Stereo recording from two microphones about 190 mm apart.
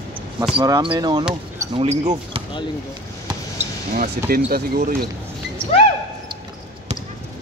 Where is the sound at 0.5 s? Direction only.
25° right (ahead or behind).